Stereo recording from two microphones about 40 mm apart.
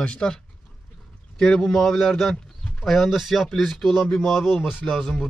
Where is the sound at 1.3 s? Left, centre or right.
Centre.